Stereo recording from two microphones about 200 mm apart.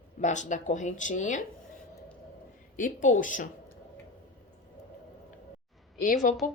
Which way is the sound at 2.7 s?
40° left (ahead or behind).